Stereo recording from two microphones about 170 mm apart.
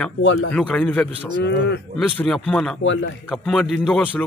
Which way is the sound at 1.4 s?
85° left.